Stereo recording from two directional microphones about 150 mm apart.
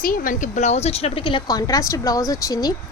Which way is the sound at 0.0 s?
70° left (ahead or behind).